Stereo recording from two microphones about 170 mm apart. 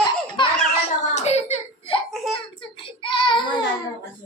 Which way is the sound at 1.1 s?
40° left (ahead or behind).